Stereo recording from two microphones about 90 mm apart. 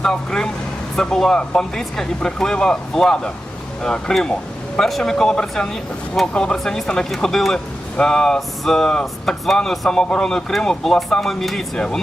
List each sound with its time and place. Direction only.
0.0 s speech: 5° left (ahead or behind)